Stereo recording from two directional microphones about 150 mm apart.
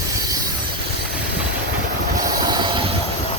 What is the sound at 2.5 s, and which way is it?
Train, 30° right (ahead or behind).